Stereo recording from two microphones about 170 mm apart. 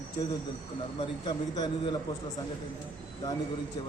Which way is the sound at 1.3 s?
25° left (ahead or behind).